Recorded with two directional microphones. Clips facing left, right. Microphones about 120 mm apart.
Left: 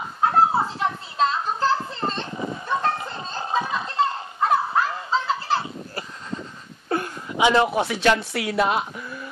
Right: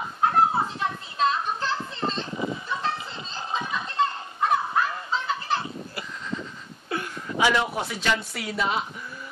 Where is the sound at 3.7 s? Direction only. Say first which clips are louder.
Left 2 dB; 35° left (ahead or behind).